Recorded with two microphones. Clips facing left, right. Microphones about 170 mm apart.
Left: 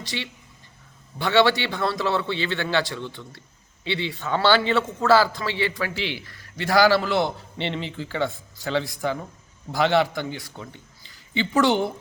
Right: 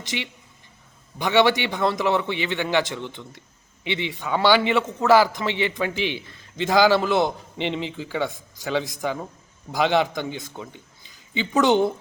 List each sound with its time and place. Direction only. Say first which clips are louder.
0.0 s a man's voice: right 1 dB; 20° right (ahead or behind)